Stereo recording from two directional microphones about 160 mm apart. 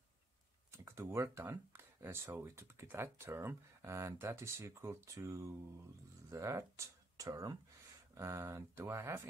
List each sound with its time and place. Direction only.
0.7 s speech: 15° right (ahead or behind)